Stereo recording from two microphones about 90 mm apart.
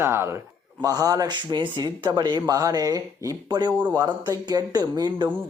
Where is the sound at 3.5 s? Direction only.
55° right (ahead or behind).